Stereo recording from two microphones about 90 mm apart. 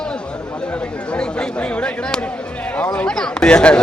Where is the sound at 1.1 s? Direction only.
10° left (ahead or behind).